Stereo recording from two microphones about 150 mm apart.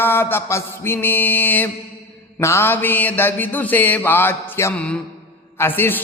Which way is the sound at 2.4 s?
15° left (ahead or behind).